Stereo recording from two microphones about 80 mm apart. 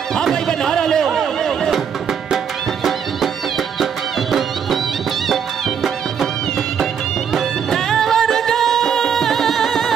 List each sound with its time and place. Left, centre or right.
0.1 s a sound: centre
2.3 s music: centre
7.3 s music: centre